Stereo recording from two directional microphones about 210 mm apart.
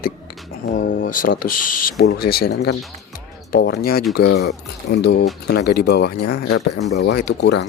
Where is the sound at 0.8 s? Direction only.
40° left (ahead or behind).